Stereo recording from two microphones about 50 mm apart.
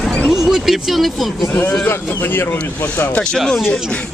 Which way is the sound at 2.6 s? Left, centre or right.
Left.